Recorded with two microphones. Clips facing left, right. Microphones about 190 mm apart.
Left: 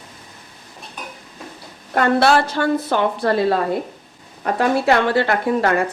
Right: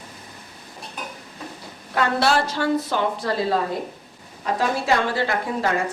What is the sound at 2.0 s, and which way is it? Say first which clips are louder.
A woman's voice: left 5 dB; 55° left (ahead or behind).